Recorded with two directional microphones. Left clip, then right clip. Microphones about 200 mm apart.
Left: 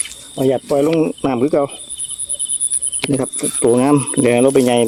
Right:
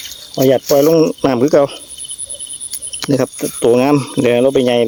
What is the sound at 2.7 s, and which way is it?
Cricket, 25° right (ahead or behind).